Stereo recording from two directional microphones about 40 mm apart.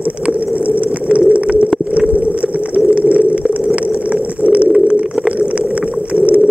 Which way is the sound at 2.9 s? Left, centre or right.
Right.